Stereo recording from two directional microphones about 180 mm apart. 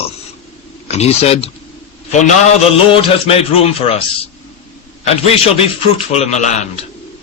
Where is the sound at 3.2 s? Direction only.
35° left (ahead or behind).